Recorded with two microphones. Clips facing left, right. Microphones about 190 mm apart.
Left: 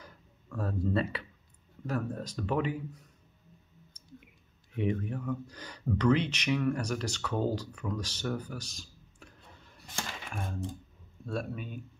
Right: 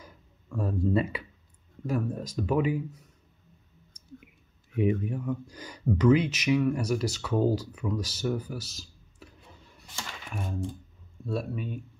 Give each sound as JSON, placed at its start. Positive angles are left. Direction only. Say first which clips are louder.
{"t": 0.0, "sound": "a sound", "louder": "right 1 dB", "side_deg": -10}
{"t": 1.9, "sound": "speech", "louder": "right 4 dB", "side_deg": -10}
{"t": 4.7, "sound": "speech", "louder": "right 5 dB", "side_deg": -10}
{"t": 11.2, "sound": "speech", "louder": "right 4 dB", "side_deg": -5}